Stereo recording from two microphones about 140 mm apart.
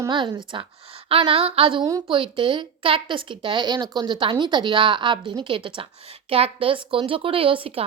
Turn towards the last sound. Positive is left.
turn(degrees=-40)  # may be behind; listen again after turning